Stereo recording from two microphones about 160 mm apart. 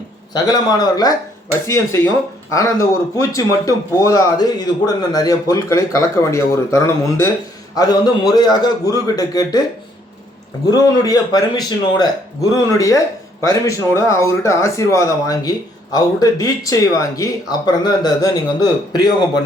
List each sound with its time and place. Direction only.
0.3 s a man's voice: 25° left (ahead or behind)
3.2 s a man's voice: 20° left (ahead or behind)
10.7 s a man's voice: 25° left (ahead or behind)